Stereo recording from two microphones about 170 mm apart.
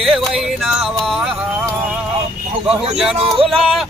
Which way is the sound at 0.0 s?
Centre (ahead or behind).